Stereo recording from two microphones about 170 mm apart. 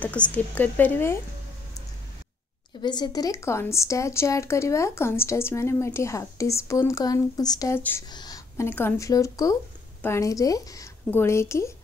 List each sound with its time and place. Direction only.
0.0 s a woman's voice: 10° left (ahead or behind)
2.8 s a woman's voice: 25° left (ahead or behind)